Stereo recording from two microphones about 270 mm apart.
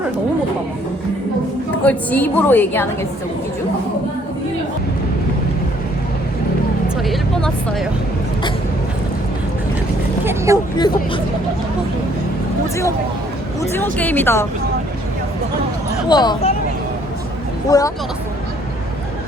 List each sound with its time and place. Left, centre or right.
1.8 s a woman's voice: centre
6.8 s vehicle: centre
10.2 s vehicle: centre
10.8 s a woman's voice: centre
13.6 s a woman's voice: centre
16.0 s a woman's voice: centre
17.7 s a woman's voice: centre